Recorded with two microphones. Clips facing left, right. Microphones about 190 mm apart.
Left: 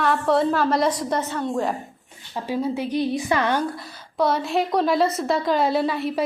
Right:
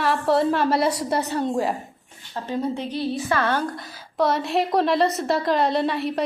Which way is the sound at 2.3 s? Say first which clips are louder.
Left 1 dB; 5° left (ahead or behind).